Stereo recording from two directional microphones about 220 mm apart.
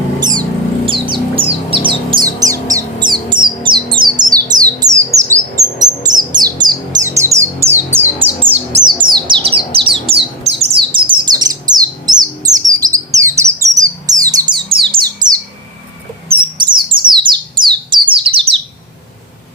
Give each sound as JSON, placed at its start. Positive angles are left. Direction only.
{"t": 0.2, "sound": "a sound", "side_deg": -20}
{"t": 0.9, "sound": "bird", "side_deg": -25}
{"t": 5.8, "sound": "music", "side_deg": -15}
{"t": 8.8, "sound": "bird", "side_deg": -20}
{"t": 16.4, "sound": "bird", "side_deg": -20}